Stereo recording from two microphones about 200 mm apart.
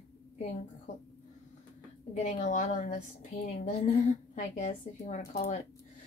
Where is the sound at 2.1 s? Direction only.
40° left (ahead or behind).